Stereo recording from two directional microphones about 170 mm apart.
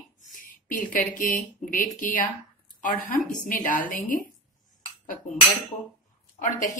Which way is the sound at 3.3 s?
50° left (ahead or behind).